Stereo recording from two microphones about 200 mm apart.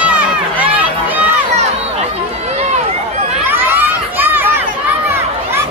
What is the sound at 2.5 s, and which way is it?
Run, 35° right (ahead or behind).